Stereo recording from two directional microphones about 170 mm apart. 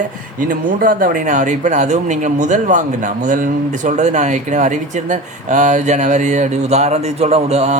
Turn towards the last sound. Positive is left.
turn(degrees=-40)  # may be behind; listen again after turning